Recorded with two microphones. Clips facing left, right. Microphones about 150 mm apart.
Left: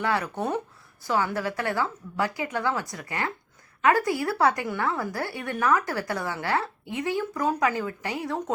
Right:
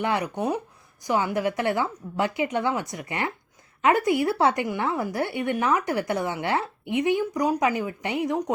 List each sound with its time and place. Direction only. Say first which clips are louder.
0.0 s speech: right 1 dB; 20° right (ahead or behind)